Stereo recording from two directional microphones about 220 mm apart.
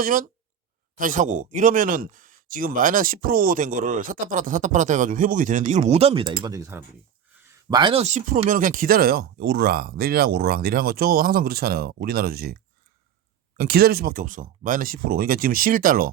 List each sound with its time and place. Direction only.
0.0 s speech: 40° right (ahead or behind)
13.6 s speech: 45° right (ahead or behind)